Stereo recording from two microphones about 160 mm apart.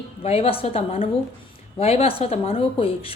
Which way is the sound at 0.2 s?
35° left (ahead or behind).